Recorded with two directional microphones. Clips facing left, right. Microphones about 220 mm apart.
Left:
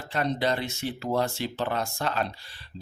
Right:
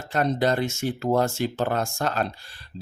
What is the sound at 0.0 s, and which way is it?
Speech, 45° right (ahead or behind).